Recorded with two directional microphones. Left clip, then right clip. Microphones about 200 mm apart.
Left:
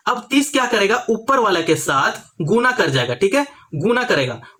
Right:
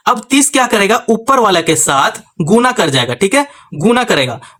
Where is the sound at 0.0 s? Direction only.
45° right (ahead or behind).